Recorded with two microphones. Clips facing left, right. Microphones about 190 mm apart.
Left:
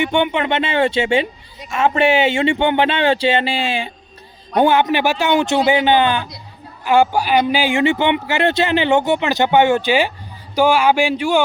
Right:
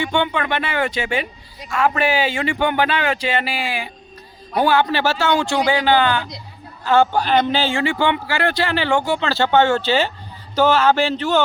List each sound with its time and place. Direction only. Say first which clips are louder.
0.0 s a man's voice: left 3 dB; 20° left (ahead or behind)